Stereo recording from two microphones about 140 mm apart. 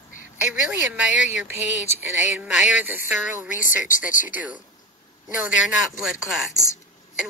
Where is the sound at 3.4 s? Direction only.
65° left (ahead or behind).